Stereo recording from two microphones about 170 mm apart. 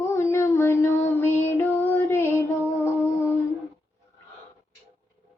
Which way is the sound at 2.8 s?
15° left (ahead or behind).